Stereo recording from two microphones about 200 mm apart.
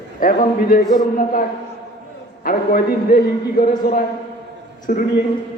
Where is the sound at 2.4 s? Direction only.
45° left (ahead or behind).